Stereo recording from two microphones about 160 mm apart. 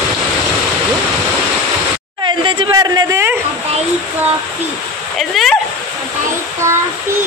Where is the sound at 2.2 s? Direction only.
30° right (ahead or behind).